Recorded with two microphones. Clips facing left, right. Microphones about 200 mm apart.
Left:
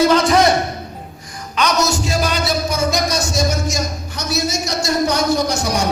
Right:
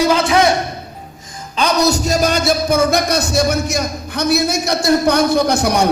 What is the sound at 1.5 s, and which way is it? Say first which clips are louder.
A man's voice: right 3 dB; 30° right (ahead or behind).